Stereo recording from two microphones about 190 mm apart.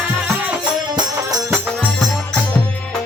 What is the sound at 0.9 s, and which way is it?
Music, 20° right (ahead or behind).